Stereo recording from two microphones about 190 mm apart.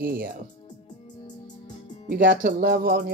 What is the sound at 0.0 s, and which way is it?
Speech, 50° right (ahead or behind).